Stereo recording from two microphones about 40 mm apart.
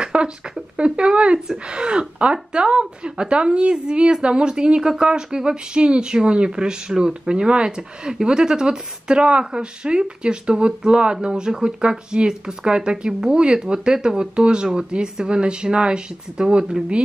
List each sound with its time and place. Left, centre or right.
0.0 s speech: right